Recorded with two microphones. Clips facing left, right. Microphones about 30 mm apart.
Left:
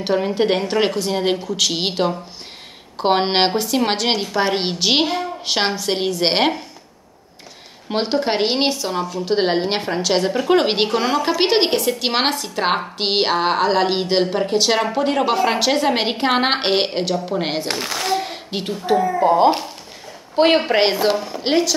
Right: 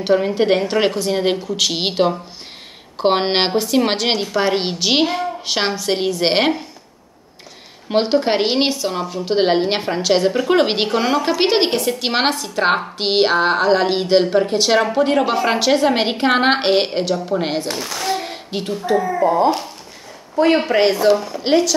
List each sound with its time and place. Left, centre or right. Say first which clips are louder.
0.0 s a woman's voice: right 2 dB; centre
7.9 s a woman's voice: right 3 dB; centre
17.6 s a woman's voice: left 1 dB; left
18.0 s a sound: even; centre
18.6 s a woman's voice: even; centre
18.9 s a woman's voice: even; centre
19.2 s a woman's voice: left 2 dB; left
20.5 s speech: right 1 dB; left
21.2 s a woman's voice: right 2 dB; centre